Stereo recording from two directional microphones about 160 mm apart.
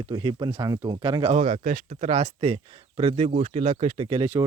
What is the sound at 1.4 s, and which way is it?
Speech, 55° right (ahead or behind).